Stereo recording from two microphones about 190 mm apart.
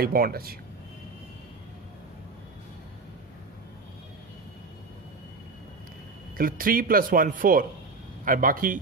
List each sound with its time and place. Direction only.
0.0 s speech: 50° right (ahead or behind)
6.3 s speech: 50° right (ahead or behind)